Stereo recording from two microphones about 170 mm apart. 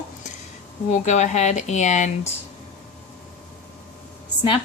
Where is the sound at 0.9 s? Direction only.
45° left (ahead or behind).